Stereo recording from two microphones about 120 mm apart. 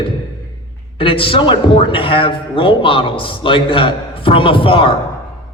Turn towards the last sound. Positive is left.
turn(degrees=45)  # may be behind; listen again after turning